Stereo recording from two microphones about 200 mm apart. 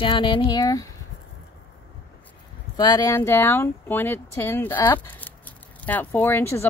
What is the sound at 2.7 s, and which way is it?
Speech, 20° left (ahead or behind).